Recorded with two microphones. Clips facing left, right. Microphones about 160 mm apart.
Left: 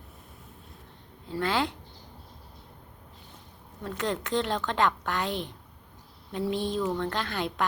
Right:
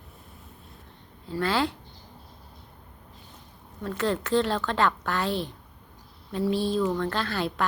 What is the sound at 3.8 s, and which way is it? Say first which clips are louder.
A woman's voice: right 4 dB; 15° left (ahead or behind).